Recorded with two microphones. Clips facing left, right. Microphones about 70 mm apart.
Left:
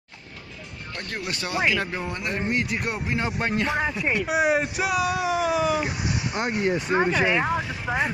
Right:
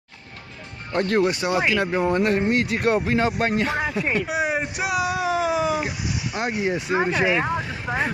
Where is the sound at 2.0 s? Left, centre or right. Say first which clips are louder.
Right 8 dB; right.